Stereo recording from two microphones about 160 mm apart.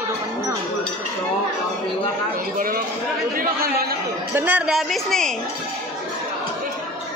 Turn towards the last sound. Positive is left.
turn(degrees=5)  # may be behind; listen again after turning